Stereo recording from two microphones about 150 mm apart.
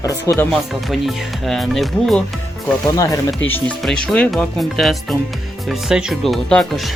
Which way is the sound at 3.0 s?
20° left (ahead or behind).